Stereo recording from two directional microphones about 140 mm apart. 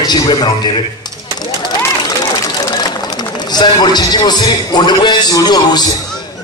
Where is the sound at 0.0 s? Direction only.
30° left (ahead or behind).